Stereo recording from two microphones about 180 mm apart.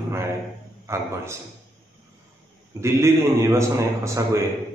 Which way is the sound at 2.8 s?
15° right (ahead or behind).